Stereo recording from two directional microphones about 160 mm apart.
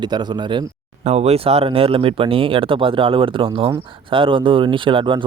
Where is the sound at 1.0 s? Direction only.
40° right (ahead or behind).